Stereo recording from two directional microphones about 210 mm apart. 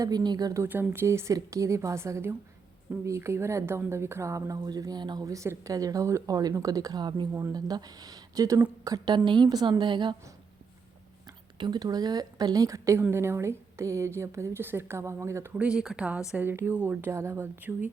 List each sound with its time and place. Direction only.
0.0 s speech: 20° right (ahead or behind)
11.5 s speech: 20° right (ahead or behind)